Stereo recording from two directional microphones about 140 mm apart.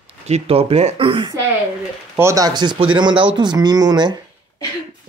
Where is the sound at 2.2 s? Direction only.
25° right (ahead or behind).